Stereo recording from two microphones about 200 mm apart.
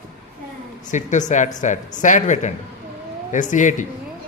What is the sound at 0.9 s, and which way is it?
A man's voice, 35° left (ahead or behind).